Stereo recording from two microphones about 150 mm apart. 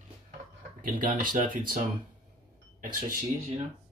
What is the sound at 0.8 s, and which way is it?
Speech, 65° right (ahead or behind).